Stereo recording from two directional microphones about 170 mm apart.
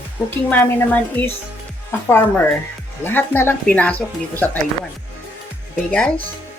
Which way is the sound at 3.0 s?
10° left (ahead or behind).